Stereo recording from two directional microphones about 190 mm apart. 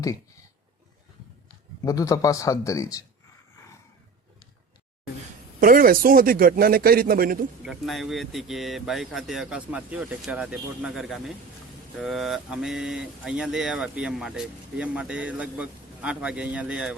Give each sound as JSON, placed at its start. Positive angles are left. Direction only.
{"t": 1.8, "sound": "a man's voice", "side_deg": 15}
{"t": 5.5, "sound": "a man's voice", "side_deg": -50}
{"t": 7.6, "sound": "speech", "side_deg": 0}